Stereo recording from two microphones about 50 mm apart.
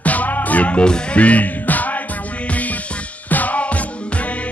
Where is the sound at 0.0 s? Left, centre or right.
Left.